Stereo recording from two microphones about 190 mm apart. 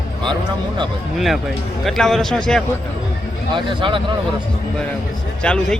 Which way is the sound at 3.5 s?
25° right (ahead or behind).